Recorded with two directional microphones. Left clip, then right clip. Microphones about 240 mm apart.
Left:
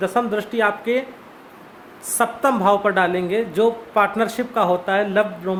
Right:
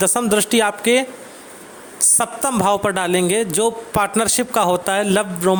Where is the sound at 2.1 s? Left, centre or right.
Right.